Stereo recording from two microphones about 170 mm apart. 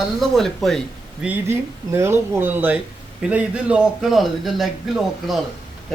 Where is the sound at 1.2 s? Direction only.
10° right (ahead or behind).